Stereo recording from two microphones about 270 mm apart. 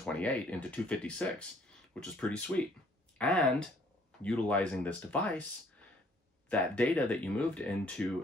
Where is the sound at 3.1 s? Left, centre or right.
Centre.